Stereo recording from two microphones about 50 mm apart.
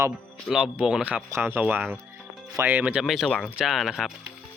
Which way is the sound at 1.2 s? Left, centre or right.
Right.